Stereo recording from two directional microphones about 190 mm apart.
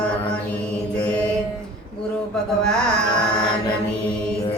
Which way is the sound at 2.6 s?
5° left (ahead or behind).